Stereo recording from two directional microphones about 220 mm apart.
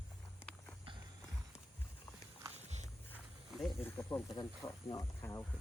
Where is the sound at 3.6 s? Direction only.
Centre (ahead or behind).